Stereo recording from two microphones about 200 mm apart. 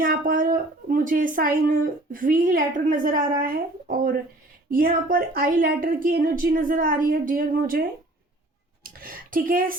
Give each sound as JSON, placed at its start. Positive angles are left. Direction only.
{"t": 0.0, "sound": "speech", "side_deg": -45}